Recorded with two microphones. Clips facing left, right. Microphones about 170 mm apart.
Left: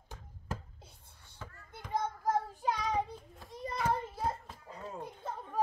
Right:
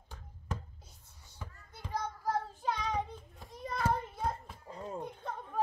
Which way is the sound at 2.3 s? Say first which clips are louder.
Left 2 dB; 15° left (ahead or behind).